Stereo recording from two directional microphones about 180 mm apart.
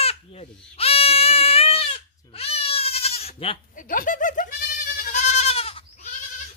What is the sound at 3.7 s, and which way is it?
Speech, 50° left (ahead or behind).